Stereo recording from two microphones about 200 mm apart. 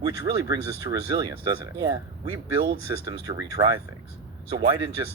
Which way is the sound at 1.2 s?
20° right (ahead or behind).